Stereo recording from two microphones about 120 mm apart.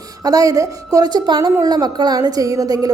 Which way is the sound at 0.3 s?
30° right (ahead or behind).